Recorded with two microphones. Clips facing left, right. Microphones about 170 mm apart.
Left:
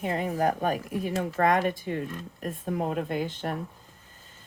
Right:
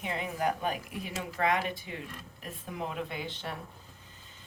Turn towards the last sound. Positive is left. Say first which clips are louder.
# left 7 dB
turn(degrees=45)  # may be behind; listen again after turning